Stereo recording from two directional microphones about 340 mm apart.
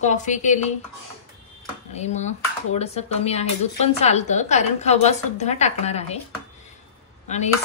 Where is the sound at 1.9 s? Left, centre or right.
Centre.